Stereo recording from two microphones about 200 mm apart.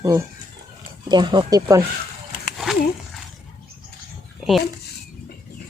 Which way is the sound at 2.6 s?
Centre (ahead or behind).